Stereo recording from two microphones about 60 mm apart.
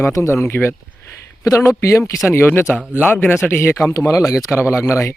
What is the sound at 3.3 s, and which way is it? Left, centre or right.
Speech, left.